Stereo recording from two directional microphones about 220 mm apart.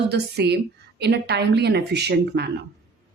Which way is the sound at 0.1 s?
50° right (ahead or behind).